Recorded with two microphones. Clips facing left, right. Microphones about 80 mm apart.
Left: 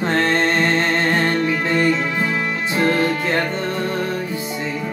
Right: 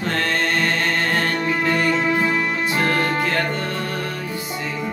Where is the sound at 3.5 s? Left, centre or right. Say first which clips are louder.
Left 3 dB; left.